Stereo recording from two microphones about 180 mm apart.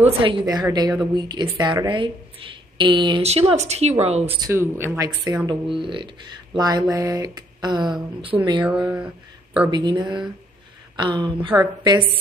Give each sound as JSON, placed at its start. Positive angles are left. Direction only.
{"t": 0.0, "sound": "speech", "side_deg": -30}
{"t": 4.4, "sound": "speech", "side_deg": -15}
{"t": 8.8, "sound": "speech", "side_deg": -5}
{"t": 9.7, "sound": "speech", "side_deg": -25}